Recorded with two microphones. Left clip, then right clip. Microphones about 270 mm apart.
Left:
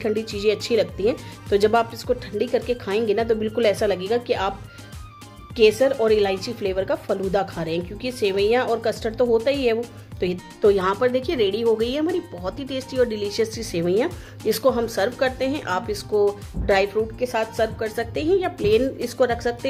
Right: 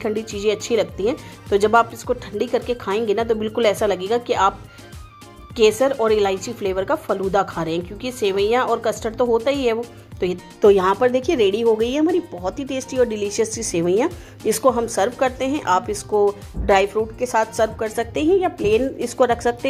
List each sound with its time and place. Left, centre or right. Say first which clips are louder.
0.0 s speech: even; centre
5.6 s speech: right 1 dB; centre